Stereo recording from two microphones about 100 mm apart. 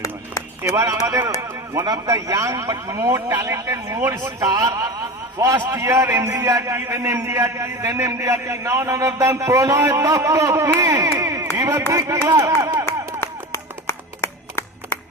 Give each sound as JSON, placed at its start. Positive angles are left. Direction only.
{"t": 0.6, "sound": "a man's voice", "side_deg": -30}
{"t": 11.1, "sound": "a sound", "side_deg": -30}
{"t": 11.9, "sound": "a man's voice", "side_deg": -35}
{"t": 13.1, "sound": "clapping", "side_deg": 25}